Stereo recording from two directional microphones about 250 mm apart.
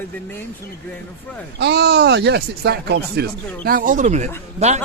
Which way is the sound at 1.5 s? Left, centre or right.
Right.